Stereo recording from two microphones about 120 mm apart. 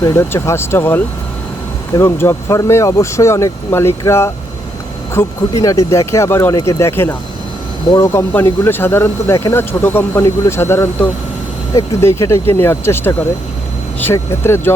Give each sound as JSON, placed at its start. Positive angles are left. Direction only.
{"t": 0.0, "sound": "speech", "side_deg": 25}